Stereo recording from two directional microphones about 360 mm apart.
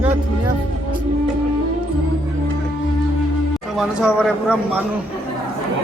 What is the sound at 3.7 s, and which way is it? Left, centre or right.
A man's voice, centre.